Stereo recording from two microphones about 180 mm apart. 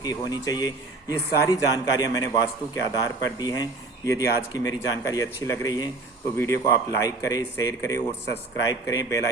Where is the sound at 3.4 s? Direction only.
20° left (ahead or behind).